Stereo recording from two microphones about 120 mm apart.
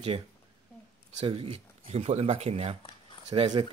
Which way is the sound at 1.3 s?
50° right (ahead or behind).